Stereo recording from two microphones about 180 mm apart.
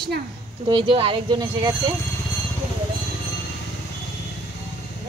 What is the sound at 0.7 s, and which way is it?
Speech, 30° right (ahead or behind).